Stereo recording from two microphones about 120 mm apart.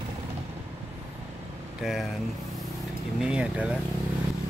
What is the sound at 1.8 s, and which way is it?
Speech, 5° right (ahead or behind).